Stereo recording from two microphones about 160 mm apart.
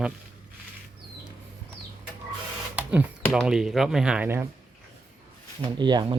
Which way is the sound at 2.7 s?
10° right (ahead or behind).